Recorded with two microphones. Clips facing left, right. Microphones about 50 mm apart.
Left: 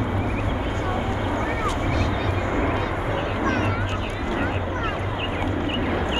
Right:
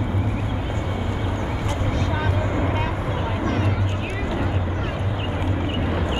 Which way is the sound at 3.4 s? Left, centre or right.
Left.